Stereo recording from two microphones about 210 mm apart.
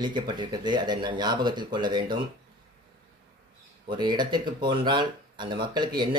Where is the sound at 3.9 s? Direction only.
20° right (ahead or behind).